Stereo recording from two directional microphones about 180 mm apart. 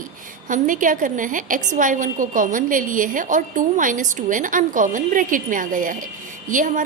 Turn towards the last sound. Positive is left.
turn(degrees=-45)  # may be behind; listen again after turning